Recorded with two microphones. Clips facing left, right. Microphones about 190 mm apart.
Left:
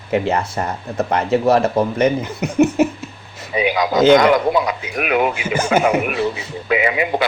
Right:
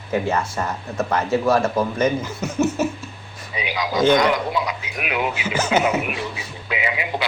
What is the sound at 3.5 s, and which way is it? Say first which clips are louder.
Speech: left 7 dB; 55° left (ahead or behind).